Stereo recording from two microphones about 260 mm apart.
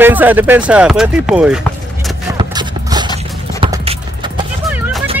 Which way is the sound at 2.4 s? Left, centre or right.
Centre.